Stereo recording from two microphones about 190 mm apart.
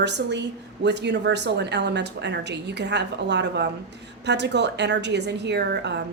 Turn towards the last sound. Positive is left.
turn(degrees=-65)  # may be behind; listen again after turning